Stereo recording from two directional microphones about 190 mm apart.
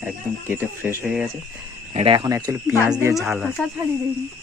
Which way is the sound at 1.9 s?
30° right (ahead or behind).